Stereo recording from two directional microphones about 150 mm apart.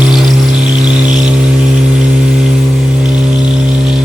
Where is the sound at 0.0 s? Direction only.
Centre (ahead or behind).